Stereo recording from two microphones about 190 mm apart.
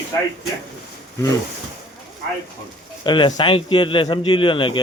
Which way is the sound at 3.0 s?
25° left (ahead or behind).